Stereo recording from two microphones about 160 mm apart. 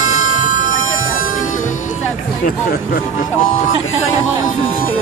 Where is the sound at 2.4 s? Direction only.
65° left (ahead or behind).